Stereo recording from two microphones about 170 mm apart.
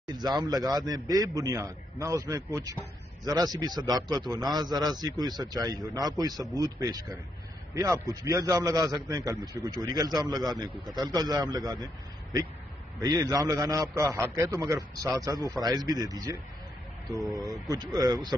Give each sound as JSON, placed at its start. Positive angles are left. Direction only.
{"t": 0.1, "sound": "a man's voice", "side_deg": -25}
{"t": 17.4, "sound": "a man's voice", "side_deg": -20}